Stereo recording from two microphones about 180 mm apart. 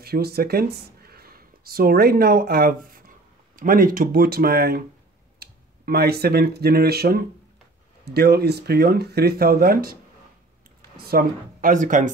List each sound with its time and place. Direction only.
0.0 s speech: 60° right (ahead or behind)
11.0 s speech: 55° right (ahead or behind)